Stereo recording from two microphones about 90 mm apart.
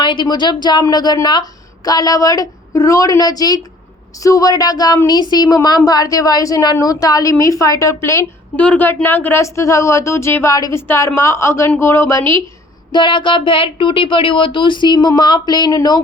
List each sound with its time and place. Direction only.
0.0 s a woman's voice: 60° left (ahead or behind); by 10.5 s 30° left (ahead or behind)
10.5 s a woman's voice: 40° left (ahead or behind)
10.8 s a woman's voice: 30° left (ahead or behind)
12.9 s speech: 60° left (ahead or behind)